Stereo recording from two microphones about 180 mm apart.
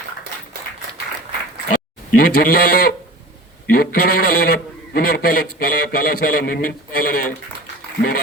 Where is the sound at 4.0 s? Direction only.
55° left (ahead or behind).